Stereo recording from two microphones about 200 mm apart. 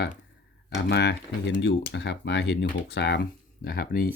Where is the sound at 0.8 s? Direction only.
55° left (ahead or behind).